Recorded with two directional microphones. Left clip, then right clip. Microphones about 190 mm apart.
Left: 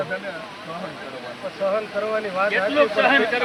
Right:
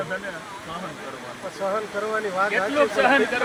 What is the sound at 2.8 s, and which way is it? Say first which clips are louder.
Speech: left 1 dB; 80° right.